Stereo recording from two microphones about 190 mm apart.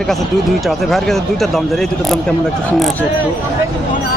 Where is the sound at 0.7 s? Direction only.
Centre (ahead or behind).